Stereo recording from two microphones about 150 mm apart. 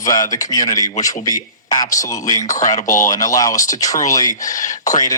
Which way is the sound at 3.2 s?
25° left (ahead or behind).